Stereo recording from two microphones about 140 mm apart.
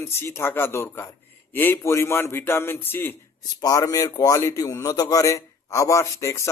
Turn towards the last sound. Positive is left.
turn(degrees=20)  # may be behind; listen again after turning